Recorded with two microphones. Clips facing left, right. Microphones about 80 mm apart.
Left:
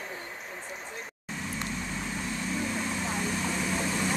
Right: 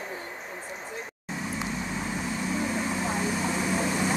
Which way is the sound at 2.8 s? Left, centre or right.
Centre.